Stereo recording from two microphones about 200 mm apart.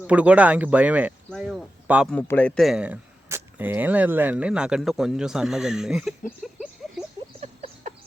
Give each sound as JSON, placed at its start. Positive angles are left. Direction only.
{"t": 0.1, "sound": "speech", "side_deg": -5}
{"t": 2.1, "sound": "speech", "side_deg": 10}
{"t": 6.4, "sound": "a sound", "side_deg": 0}
{"t": 7.4, "sound": "chicken", "side_deg": -35}